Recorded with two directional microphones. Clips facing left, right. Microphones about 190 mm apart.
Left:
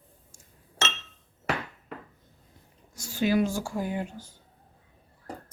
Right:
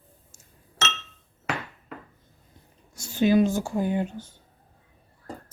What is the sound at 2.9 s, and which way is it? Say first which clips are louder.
Speech: right 5 dB; 25° right (ahead or behind).